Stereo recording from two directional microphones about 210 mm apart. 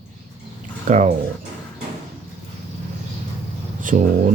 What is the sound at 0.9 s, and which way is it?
Speech, 35° right (ahead or behind).